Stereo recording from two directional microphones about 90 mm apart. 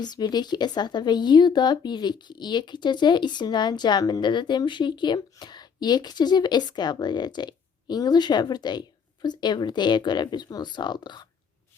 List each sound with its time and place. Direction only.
0.0 s speech: 50° left (ahead or behind)